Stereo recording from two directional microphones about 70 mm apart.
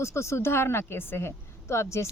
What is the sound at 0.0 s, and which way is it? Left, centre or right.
A woman's voice, left.